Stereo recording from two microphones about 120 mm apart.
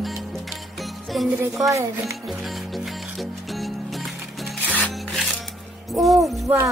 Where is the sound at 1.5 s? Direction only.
25° right (ahead or behind).